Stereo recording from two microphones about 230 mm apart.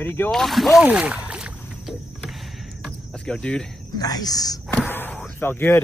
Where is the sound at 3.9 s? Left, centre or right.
Centre.